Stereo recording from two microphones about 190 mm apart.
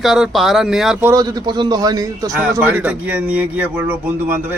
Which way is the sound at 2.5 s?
10° right (ahead or behind).